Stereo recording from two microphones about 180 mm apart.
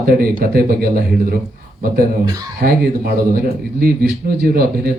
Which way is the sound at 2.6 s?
60° right (ahead or behind).